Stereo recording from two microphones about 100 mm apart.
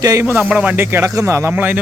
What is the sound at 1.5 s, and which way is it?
Speech, 15° right (ahead or behind).